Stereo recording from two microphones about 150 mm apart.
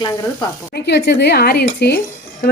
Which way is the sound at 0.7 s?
90° left.